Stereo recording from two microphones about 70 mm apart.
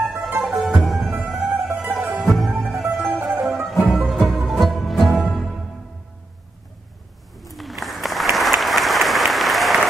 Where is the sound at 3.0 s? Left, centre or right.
Right.